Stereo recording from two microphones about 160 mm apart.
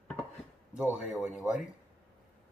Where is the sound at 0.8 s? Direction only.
5° right (ahead or behind).